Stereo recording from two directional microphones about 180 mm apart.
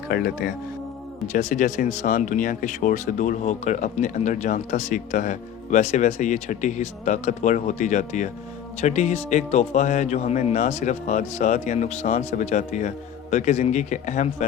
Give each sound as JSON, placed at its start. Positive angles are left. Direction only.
{"t": 0.1, "sound": "speech", "side_deg": 60}
{"t": 1.3, "sound": "a man's voice", "side_deg": 40}